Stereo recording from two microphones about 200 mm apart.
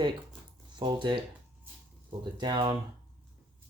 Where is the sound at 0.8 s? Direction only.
25° right (ahead or behind).